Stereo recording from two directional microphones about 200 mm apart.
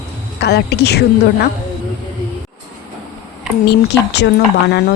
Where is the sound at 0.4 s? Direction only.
55° left (ahead or behind).